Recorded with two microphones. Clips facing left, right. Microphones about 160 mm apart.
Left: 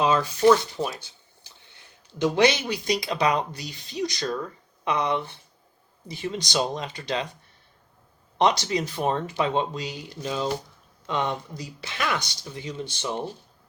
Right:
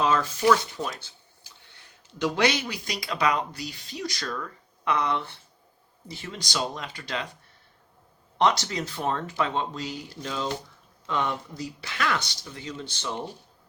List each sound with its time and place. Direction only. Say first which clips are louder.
0.0 s speech: left 3 dB; 15° left (ahead or behind)
2.2 s speech: left 4 dB; 20° left (ahead or behind)
8.4 s speech: left 2 dB; 15° left (ahead or behind)